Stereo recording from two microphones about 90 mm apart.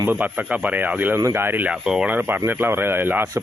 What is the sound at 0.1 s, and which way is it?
Speech, 15° right (ahead or behind).